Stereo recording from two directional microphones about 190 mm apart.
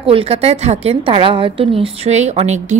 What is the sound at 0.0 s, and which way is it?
A woman's voice, 30° right (ahead or behind).